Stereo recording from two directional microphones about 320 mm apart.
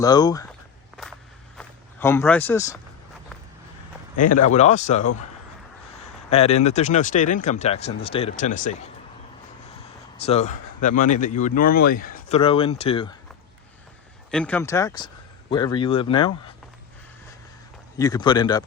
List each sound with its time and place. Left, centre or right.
0.0 s speech: centre
1.5 s speech: centre
4.2 s speech: left
4.4 s speech: left
6.3 s speech: centre
10.2 s speech: centre
14.3 s speech: centre
17.9 s speech: centre